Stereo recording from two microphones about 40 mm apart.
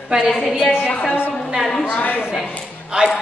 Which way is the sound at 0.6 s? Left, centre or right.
Right.